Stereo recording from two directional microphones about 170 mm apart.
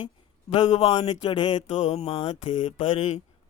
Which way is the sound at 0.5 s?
30° left (ahead or behind).